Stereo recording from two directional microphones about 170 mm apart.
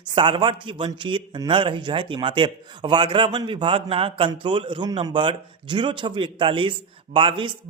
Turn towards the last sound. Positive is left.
turn(degrees=-30)  # may be behind; listen again after turning